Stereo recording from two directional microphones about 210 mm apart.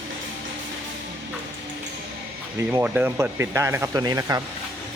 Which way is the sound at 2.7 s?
10° right (ahead or behind).